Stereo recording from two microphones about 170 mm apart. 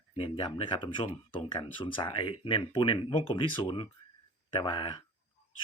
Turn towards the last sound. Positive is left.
turn(degrees=30)  # may be behind; listen again after turning